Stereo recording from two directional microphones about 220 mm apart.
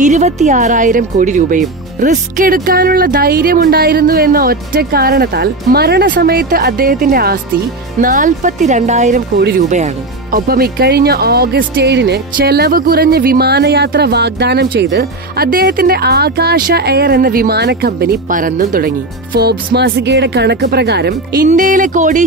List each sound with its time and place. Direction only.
0.0 s speech: 30° right (ahead or behind)
10.3 s speech: 45° right (ahead or behind)
21.5 s speech: 35° right (ahead or behind)